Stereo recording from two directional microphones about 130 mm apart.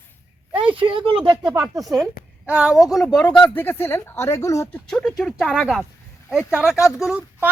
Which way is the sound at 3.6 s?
15° left (ahead or behind).